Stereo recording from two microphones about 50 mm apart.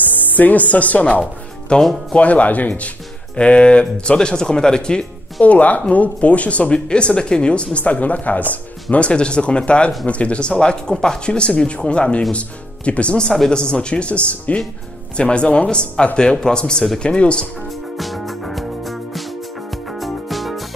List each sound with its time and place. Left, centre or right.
0.0 s speech: left
1.8 s speech: centre
2.1 s speech: left
13.3 s a man's voice: centre
13.6 s a man's voice: centre
17.9 s music: centre